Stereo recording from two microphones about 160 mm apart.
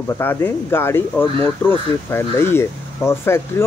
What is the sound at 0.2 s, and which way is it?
Speech, 15° left (ahead or behind).